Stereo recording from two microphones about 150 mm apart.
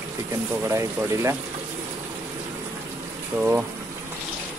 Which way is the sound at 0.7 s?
20° right (ahead or behind).